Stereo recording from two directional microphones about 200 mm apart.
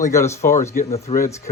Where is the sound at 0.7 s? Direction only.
30° left (ahead or behind).